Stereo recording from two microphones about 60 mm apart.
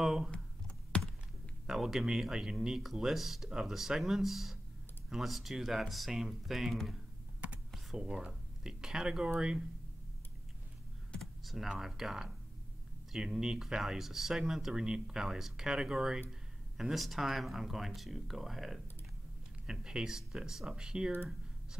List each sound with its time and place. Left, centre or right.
0.0 s computer keyboard: centre
0.3 s computer keyboard: centre
1.7 s speech: centre
11.1 s speech: centre